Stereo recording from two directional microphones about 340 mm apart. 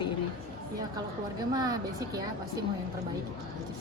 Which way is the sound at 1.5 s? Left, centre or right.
Centre.